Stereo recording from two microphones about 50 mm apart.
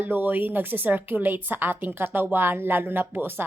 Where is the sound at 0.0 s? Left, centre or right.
Right.